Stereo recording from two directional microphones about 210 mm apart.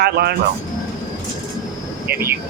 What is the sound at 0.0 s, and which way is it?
Speech, 50° right (ahead or behind).